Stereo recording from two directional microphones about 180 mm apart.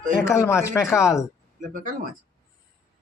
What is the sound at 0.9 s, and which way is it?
Speech, 5° right (ahead or behind).